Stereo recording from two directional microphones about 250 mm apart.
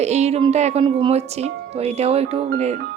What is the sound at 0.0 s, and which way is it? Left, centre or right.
Speech, right.